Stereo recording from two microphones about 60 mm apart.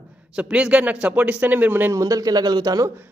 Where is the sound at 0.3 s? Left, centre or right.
Centre.